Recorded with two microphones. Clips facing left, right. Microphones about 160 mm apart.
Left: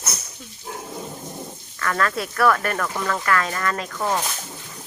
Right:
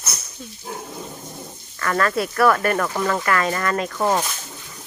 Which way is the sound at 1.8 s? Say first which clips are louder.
Right 3 dB; 5° right (ahead or behind).